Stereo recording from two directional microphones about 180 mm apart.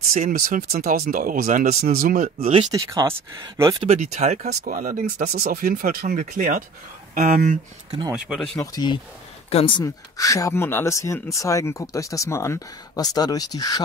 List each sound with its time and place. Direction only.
0.1 s speech: 50° right (ahead or behind)
2.7 s speech: 20° right (ahead or behind)
3.8 s speech: 35° right (ahead or behind)
4.5 s speech: 50° right (ahead or behind)
8.1 s speech: centre (ahead or behind)
8.7 s speech: 25° left (ahead or behind)